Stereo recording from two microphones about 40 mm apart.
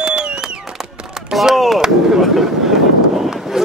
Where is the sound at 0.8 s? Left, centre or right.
Centre.